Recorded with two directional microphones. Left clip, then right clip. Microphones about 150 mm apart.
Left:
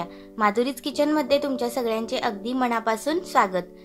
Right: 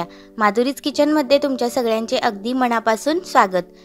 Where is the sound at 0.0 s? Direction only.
45° right (ahead or behind).